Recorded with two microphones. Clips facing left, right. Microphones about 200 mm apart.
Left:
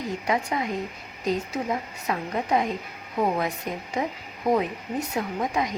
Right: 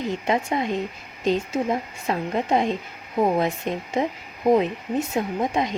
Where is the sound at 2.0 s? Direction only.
25° right (ahead or behind).